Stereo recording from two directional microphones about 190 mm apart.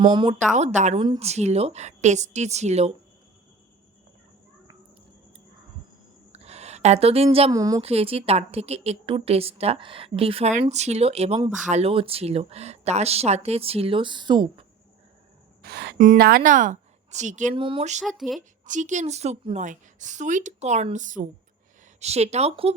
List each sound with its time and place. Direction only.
0.0 s speech: 25° right (ahead or behind)
0.5 s a woman's voice: 40° right (ahead or behind)
6.3 s a sound: 35° right (ahead or behind)
7.5 s a woman's voice: 20° right (ahead or behind)
7.8 s a woman's voice: 30° right (ahead or behind)
15.6 s speech: 60° right (ahead or behind)
16.0 s a woman's voice: 45° right (ahead or behind)
17.5 s speech: 25° right (ahead or behind)
18.0 s speech: centre (ahead or behind)
18.3 s a woman's voice: 40° right (ahead or behind)